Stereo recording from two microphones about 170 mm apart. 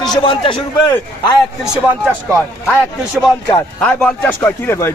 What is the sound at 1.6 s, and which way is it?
Speech, 5° right (ahead or behind).